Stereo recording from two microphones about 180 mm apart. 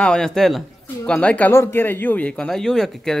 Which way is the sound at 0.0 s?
5° left (ahead or behind).